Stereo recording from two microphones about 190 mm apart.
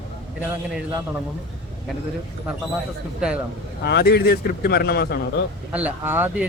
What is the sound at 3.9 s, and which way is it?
Speech, 60° left (ahead or behind).